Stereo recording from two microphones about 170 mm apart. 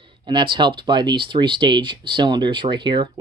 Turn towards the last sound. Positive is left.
turn(degrees=-25)  # may be behind; listen again after turning